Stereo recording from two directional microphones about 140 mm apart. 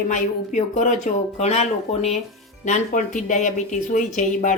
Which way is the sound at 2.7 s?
65° left (ahead or behind).